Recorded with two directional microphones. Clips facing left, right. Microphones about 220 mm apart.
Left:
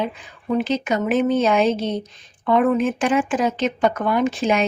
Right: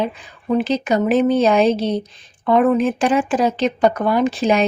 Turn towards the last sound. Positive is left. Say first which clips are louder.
# right 3 dB
turn(degrees=-35)  # may be behind; listen again after turning